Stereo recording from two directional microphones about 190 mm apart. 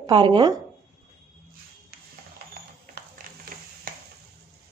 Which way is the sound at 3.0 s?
50° right (ahead or behind).